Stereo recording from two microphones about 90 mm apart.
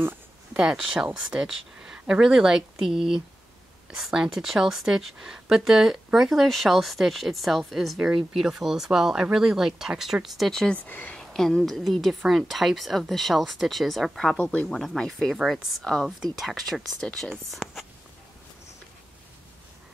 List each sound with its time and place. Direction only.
0.5 s speech: 5° right (ahead or behind)
10.9 s speech: 20° left (ahead or behind)
11.1 s speech: 5° left (ahead or behind)
14.3 s speech: 15° left (ahead or behind)
14.8 s speech: 5° left (ahead or behind)
15.8 s speech: 10° left (ahead or behind)